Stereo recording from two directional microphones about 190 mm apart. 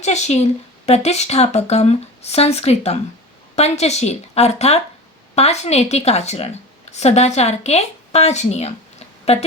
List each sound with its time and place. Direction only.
0.0 s a woman's voice: 35° left (ahead or behind)